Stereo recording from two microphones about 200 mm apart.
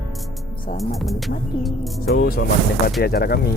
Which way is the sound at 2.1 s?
50° left (ahead or behind).